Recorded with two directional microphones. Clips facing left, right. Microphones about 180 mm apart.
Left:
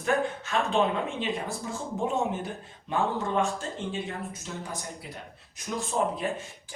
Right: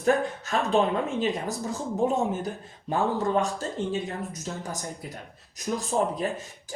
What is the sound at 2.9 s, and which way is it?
Speech, 40° right (ahead or behind).